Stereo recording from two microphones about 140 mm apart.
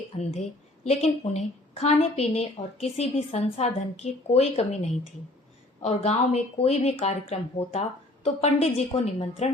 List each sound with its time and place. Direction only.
0.2 s a woman's voice: 55° left (ahead or behind)